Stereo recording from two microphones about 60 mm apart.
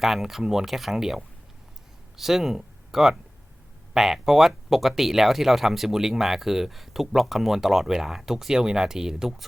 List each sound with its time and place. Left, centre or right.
0.0 s speech: centre